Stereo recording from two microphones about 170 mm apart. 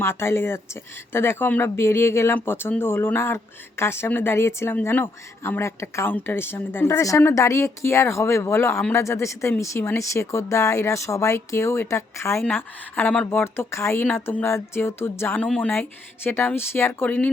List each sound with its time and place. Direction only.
0.0 s speech: 15° left (ahead or behind)